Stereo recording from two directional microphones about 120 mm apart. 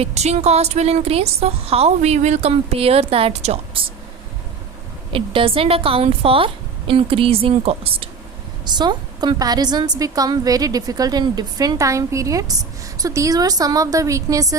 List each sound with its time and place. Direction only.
0.0 s a woman's voice: 65° right (ahead or behind)
5.1 s a woman's voice: 45° right (ahead or behind)
8.6 s a woman's voice: 35° right (ahead or behind)